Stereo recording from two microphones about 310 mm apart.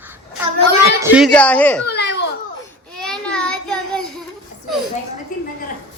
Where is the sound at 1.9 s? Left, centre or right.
Left.